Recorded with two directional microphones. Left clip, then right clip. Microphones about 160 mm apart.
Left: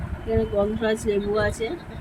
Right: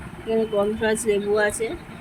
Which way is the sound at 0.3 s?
Centre (ahead or behind).